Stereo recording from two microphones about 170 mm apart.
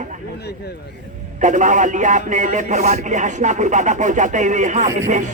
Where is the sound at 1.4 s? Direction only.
45° right (ahead or behind).